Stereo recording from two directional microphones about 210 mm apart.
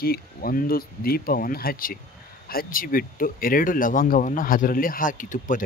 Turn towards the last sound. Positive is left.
turn(degrees=40)  # may be behind; listen again after turning